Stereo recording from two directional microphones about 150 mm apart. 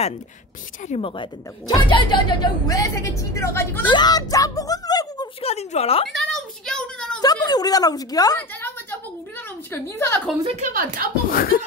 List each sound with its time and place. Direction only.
0.8 s speech: 40° left (ahead or behind)
1.7 s speech: 30° left (ahead or behind)
3.8 s a sound: 30° left (ahead or behind)
5.4 s a woman's voice: 45° left (ahead or behind)
6.1 s a sound: 5° left (ahead or behind)
7.2 s a woman's voice: 25° left (ahead or behind)
9.7 s a woman's voice: 15° left (ahead or behind)
10.4 s a woman's voice: 45° right (ahead or behind)
10.7 s speech: 70° right (ahead or behind)
11.2 s speech: 75° left (ahead or behind)